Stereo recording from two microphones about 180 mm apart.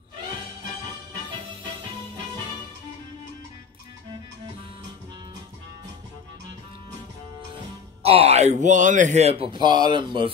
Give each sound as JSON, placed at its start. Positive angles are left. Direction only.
{"t": 8.0, "sound": "speech", "side_deg": -35}